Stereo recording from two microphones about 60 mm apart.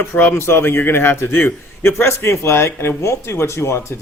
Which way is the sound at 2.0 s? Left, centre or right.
Left.